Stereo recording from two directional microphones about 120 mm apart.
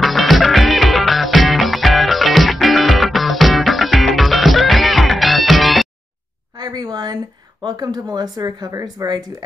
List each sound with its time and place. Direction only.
0.0 s music: centre (ahead or behind)
6.5 s a sound: 35° right (ahead or behind)
7.6 s speech: 35° right (ahead or behind)